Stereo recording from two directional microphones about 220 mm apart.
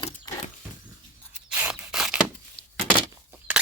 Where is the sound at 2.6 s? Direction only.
25° left (ahead or behind).